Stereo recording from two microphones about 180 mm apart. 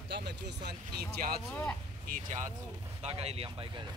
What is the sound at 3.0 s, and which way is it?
Speech, 35° right (ahead or behind).